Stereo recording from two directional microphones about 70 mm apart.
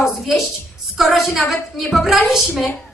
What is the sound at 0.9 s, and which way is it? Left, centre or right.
A man's voice, centre.